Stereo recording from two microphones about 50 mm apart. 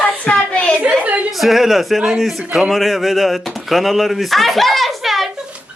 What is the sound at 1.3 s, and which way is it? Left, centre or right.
Speech, centre.